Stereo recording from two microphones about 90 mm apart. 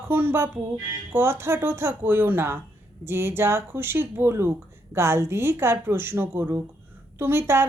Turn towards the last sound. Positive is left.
turn(degrees=-25)  # may be behind; listen again after turning